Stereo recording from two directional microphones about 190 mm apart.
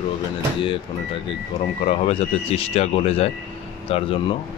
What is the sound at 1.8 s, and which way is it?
Speech, 30° left (ahead or behind).